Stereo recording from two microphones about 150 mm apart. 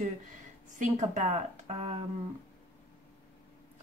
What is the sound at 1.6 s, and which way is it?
Speech, 40° right (ahead or behind).